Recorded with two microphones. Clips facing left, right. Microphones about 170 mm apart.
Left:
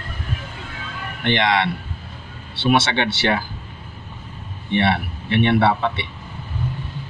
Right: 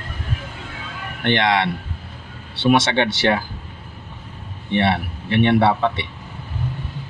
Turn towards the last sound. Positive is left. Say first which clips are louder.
# right 1 dB
turn(degrees=-40)  # may be behind; listen again after turning